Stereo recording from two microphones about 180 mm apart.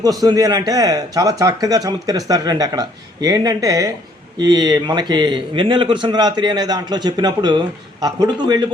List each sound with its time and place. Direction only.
0.0 s speech: 20° right (ahead or behind)